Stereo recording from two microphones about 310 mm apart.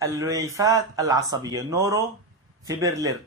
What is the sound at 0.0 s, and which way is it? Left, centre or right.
Speech, centre.